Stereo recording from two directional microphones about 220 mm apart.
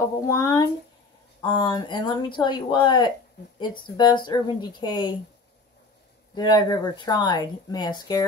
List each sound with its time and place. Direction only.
0.0 s speech: 15° left (ahead or behind)
6.3 s speech: 20° left (ahead or behind)